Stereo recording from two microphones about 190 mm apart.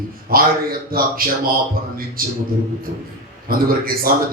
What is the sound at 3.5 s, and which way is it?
Speech, 50° right (ahead or behind).